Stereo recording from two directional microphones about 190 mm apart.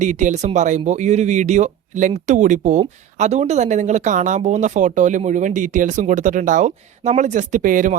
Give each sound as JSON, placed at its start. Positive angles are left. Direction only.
{"t": 0.0, "sound": "speech", "side_deg": -40}